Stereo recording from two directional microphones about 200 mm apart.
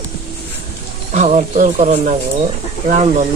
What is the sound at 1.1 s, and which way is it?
Speech, 35° right (ahead or behind).